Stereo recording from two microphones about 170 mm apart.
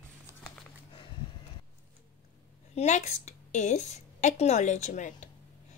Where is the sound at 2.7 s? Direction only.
40° left (ahead or behind).